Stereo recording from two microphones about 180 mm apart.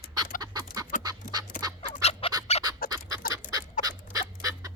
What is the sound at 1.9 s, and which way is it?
Squawk, 35° left (ahead or behind).